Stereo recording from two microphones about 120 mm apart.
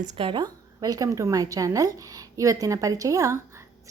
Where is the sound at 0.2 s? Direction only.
45° right (ahead or behind).